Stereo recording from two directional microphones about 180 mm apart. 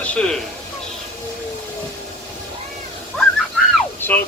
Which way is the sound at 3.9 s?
10° left (ahead or behind).